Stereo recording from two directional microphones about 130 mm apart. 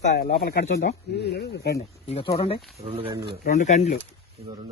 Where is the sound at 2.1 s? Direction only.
45° left (ahead or behind).